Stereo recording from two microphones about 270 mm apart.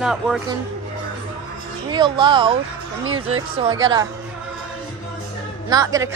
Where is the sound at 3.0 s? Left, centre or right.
Right.